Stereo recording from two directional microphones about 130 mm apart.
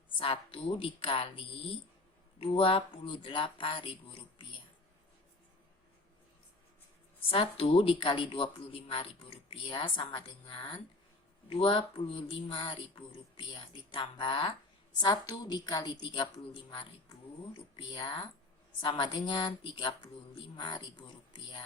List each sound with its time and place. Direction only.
0.2 s a woman's voice: 40° left (ahead or behind)
7.3 s a woman's voice: 45° left (ahead or behind)